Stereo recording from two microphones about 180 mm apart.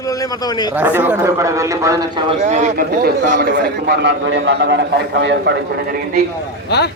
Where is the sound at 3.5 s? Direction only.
65° right (ahead or behind); by 5.5 s 80° right.